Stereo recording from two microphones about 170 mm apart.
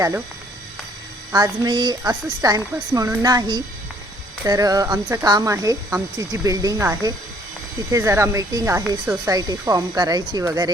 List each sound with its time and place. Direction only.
1.3 s speech: 25° right (ahead or behind)